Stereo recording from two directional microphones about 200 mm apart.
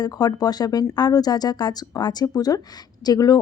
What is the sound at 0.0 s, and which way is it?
Speech, 20° left (ahead or behind).